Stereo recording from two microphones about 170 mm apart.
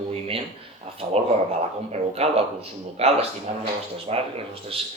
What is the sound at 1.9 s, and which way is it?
Speech, 40° right (ahead or behind).